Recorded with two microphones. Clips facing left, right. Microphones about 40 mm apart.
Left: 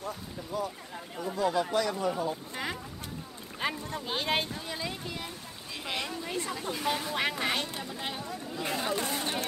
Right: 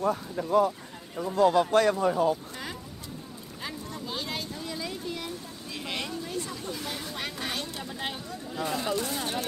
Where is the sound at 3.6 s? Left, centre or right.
Left.